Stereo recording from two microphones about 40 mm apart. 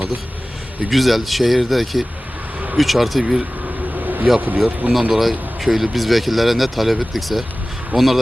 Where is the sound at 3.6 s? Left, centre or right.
Right.